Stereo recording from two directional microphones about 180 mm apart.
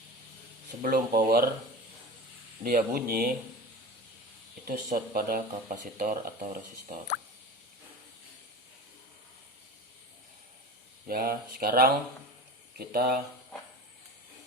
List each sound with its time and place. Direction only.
0.8 s speech: 50° right (ahead or behind)
2.6 s speech: 55° right (ahead or behind)
4.6 s speech: 50° right (ahead or behind)
11.0 s speech: 55° right (ahead or behind)